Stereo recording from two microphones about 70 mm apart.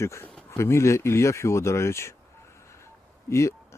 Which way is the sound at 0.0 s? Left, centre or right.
Left.